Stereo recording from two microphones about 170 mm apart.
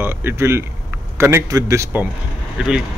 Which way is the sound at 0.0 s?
15° right (ahead or behind).